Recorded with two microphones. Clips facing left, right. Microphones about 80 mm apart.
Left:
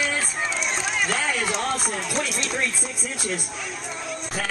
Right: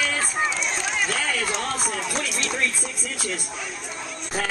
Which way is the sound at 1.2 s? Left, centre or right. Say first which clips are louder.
Left 1 dB; centre.